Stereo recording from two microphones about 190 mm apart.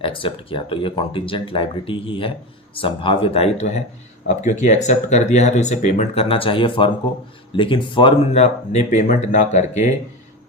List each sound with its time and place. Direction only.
0.0 s speech: 30° left (ahead or behind)